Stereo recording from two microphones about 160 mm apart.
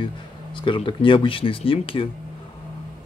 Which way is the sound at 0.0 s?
30° left (ahead or behind).